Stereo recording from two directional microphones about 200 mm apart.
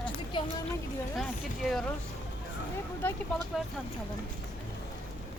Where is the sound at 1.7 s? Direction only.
Centre (ahead or behind).